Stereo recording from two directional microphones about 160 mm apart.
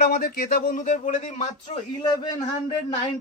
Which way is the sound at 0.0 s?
70° left (ahead or behind).